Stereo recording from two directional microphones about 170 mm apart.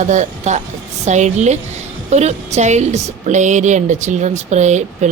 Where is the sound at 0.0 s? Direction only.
45° right (ahead or behind).